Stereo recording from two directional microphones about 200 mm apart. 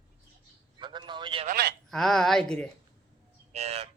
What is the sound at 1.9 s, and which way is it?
Speech, centre (ahead or behind).